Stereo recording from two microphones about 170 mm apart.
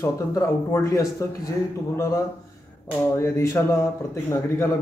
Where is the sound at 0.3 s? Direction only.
20° left (ahead or behind).